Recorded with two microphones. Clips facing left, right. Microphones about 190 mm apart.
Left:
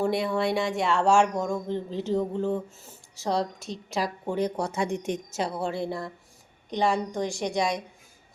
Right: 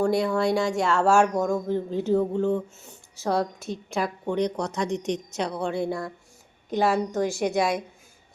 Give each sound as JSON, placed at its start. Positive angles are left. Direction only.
{"t": 0.0, "sound": "speech", "side_deg": 0}
{"t": 4.9, "sound": "a woman's voice", "side_deg": 55}
{"t": 5.1, "sound": "speech", "side_deg": 5}